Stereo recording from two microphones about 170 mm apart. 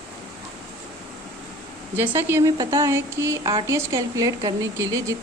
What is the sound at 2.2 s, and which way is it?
Speech, 15° right (ahead or behind).